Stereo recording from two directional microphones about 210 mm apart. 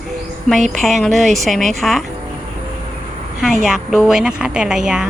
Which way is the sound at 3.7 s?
Centre (ahead or behind).